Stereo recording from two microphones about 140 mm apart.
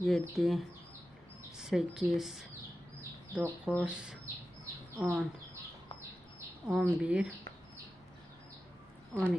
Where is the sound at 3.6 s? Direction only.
10° right (ahead or behind).